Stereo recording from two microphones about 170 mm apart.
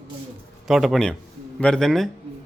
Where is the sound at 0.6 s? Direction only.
Centre (ahead or behind).